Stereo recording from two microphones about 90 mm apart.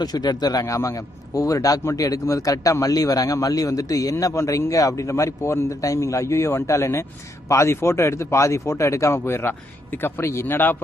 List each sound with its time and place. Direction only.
0.0 s speech: 45° left (ahead or behind)
0.6 s a man's voice: 35° left (ahead or behind)